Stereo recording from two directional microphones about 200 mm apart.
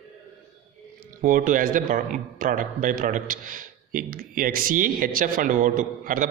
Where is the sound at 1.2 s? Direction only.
40° right (ahead or behind).